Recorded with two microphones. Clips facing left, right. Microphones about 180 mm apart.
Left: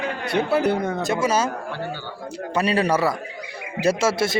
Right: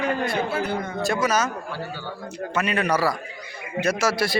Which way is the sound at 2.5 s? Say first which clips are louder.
Left 3 dB; 35° left (ahead or behind).